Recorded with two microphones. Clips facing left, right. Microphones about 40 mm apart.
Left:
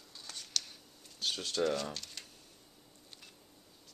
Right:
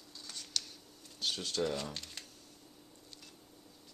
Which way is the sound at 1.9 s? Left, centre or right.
Centre.